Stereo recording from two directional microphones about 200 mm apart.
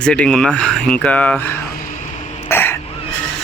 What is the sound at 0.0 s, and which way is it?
Speech, 5° left (ahead or behind).